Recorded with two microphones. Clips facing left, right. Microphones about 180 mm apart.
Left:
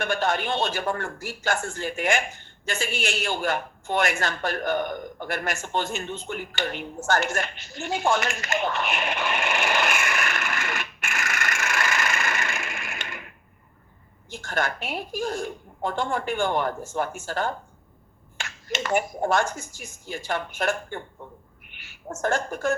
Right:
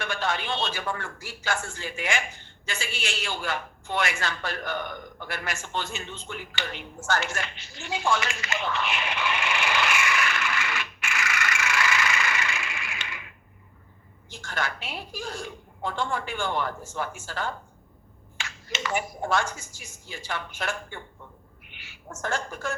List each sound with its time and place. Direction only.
0.0 s speech: 50° left (ahead or behind)
14.3 s a woman's voice: 50° left (ahead or behind)
22.1 s a woman's voice: 50° left (ahead or behind)